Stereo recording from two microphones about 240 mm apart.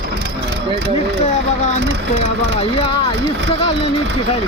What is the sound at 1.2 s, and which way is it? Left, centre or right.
Speech, left.